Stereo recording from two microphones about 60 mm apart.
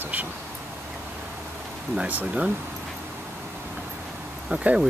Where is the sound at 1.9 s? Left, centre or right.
Right.